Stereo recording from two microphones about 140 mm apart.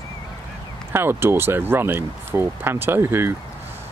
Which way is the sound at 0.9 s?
15° right (ahead or behind).